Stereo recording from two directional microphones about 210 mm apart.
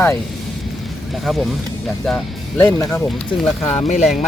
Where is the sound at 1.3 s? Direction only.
Centre (ahead or behind).